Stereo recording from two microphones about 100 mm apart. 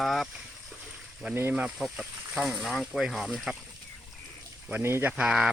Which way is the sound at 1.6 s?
5° right (ahead or behind).